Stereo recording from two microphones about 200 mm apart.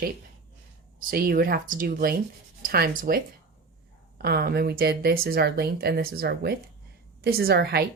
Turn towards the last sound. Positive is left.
turn(degrees=-50)  # may be behind; listen again after turning